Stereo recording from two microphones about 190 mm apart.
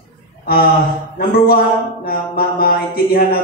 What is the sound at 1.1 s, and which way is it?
Speech, 50° left (ahead or behind).